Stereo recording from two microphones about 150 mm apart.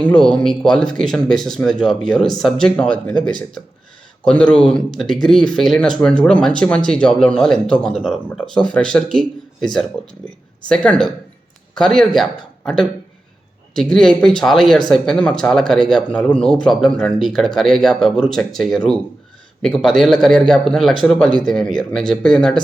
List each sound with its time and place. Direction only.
0.0 s speech: 5° left (ahead or behind)
10.7 s speech: 5° left (ahead or behind)